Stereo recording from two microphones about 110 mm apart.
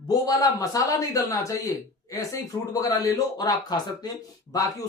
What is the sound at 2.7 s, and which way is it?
A man's voice, 30° left (ahead or behind).